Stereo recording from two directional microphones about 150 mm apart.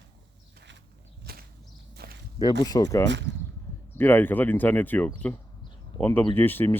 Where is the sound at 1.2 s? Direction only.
90° right.